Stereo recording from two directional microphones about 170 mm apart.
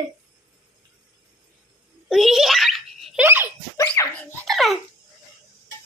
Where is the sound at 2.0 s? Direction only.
Centre (ahead or behind).